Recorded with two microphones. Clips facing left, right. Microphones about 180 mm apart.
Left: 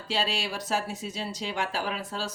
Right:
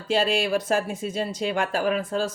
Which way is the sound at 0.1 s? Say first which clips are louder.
Right 9 dB; 50° right (ahead or behind).